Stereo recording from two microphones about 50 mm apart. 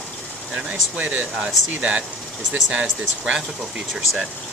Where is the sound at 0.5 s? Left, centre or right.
Right.